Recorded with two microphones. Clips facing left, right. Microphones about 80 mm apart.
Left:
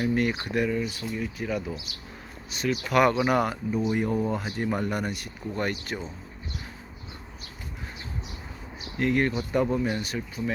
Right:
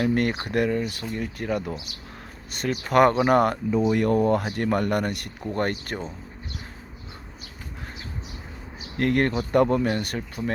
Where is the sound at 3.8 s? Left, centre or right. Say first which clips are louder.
Right 6 dB; right.